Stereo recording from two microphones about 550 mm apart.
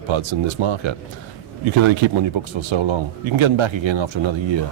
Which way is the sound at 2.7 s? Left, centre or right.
Right.